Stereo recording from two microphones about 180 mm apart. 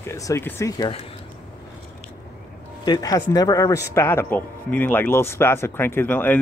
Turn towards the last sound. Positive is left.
turn(degrees=10)  # may be behind; listen again after turning